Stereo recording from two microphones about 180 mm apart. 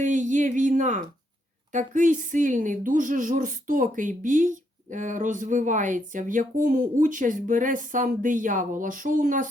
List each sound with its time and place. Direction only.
0.0 s speech: 45° right (ahead or behind)